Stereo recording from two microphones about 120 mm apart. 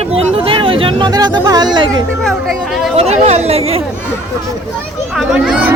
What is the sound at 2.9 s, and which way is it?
Speech, 60° right (ahead or behind).